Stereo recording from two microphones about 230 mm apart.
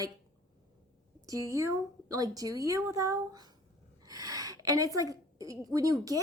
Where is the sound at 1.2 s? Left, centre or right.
Centre.